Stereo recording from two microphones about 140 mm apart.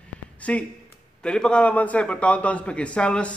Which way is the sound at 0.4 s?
10° left (ahead or behind).